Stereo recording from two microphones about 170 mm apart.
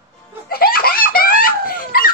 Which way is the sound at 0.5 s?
60° left (ahead or behind).